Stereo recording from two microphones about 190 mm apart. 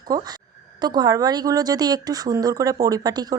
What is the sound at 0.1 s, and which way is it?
Speech, 20° right (ahead or behind).